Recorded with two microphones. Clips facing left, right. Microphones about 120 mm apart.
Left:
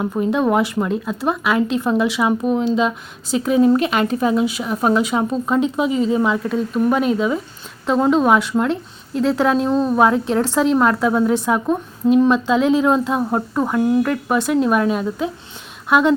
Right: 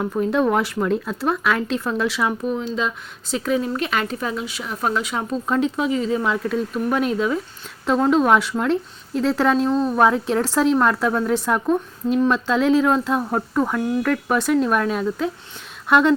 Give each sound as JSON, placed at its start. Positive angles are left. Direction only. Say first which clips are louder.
{"t": 0.0, "sound": "speech", "louder": "left 1 dB", "side_deg": 10}
{"t": 5.3, "sound": "speech", "louder": "left 3 dB", "side_deg": 5}